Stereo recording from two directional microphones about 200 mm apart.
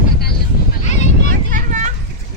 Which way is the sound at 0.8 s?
35° left (ahead or behind).